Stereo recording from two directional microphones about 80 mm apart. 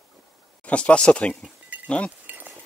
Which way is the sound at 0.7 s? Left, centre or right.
Centre.